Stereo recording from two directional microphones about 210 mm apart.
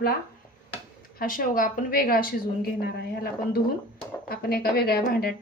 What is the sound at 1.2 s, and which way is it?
A woman's voice, 40° left (ahead or behind).